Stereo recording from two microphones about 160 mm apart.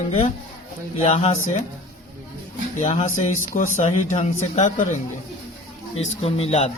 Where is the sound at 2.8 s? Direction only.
50° left (ahead or behind).